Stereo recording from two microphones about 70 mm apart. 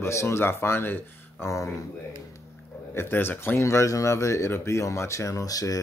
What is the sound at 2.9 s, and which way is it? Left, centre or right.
Speech, left.